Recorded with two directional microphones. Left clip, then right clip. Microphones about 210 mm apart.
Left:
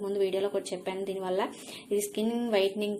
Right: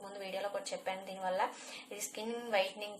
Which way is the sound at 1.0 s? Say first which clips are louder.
Left 5 dB; 40° left (ahead or behind).